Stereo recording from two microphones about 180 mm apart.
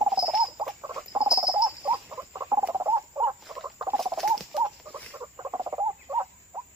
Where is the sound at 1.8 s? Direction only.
15° right (ahead or behind).